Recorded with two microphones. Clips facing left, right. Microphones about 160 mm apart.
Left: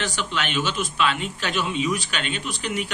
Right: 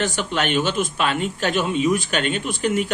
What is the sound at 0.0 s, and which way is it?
A man's voice, 50° right (ahead or behind).